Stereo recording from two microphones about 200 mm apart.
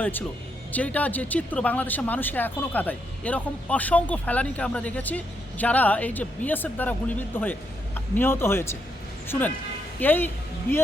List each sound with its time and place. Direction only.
0.0 s speech: 10° left (ahead or behind)